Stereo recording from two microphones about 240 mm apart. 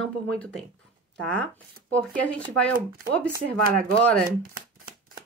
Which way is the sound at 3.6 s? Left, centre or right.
Right.